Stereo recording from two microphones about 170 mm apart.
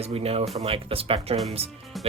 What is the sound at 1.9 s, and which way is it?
Music, centre (ahead or behind).